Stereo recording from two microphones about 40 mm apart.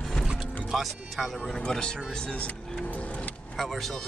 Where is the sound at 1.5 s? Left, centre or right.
Centre.